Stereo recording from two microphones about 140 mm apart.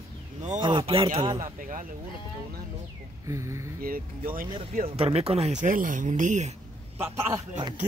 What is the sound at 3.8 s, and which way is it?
Speech, 90° right.